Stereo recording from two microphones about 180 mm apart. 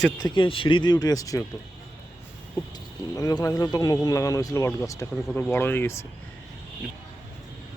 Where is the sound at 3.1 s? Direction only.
20° left (ahead or behind).